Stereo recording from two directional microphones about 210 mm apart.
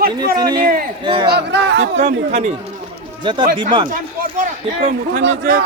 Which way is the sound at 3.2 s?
20° right (ahead or behind).